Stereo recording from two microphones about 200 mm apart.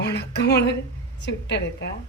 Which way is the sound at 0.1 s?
60° left (ahead or behind).